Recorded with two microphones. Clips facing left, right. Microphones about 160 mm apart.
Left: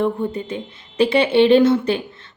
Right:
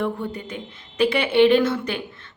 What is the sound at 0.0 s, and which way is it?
A woman's voice, 25° left (ahead or behind).